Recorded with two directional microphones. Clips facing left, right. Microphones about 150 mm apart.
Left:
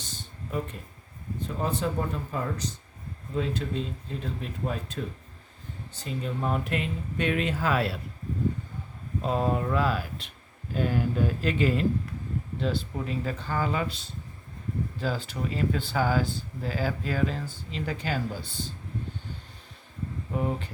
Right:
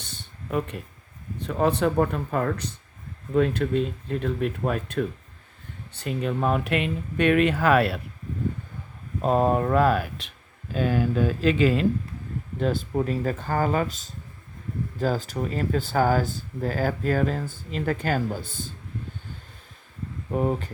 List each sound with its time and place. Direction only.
0.0 s a sound: 60° right (ahead or behind)
1.4 s speech: 70° right (ahead or behind)
9.2 s speech: 50° right (ahead or behind)
10.8 s speech: 90° right
12.5 s speech: 50° right (ahead or behind)
20.3 s speech: 45° right (ahead or behind)